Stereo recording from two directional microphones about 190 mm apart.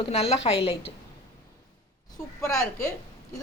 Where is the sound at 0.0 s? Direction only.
30° left (ahead or behind).